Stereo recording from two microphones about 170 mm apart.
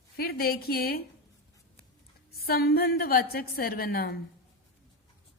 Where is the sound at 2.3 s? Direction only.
65° left (ahead or behind).